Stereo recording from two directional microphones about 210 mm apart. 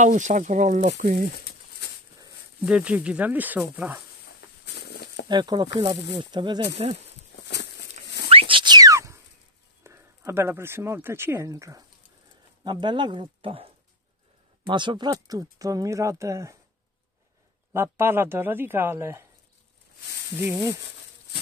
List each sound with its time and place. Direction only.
0.0 s speech: 35° right (ahead or behind)
2.6 s speech: 5° right (ahead or behind)
4.6 s a sound: 50° left (ahead or behind)
5.3 s speech: 20° right (ahead or behind)
8.3 s a sound: 25° right (ahead or behind)
9.8 s speech: 10° right (ahead or behind)
14.7 s speech: 20° right (ahead or behind)
17.7 s speech: 10° right (ahead or behind)
20.3 s speech: 10° right (ahead or behind)